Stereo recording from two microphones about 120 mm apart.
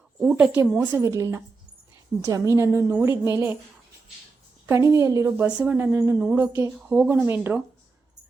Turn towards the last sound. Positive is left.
turn(degrees=-15)  # may be behind; listen again after turning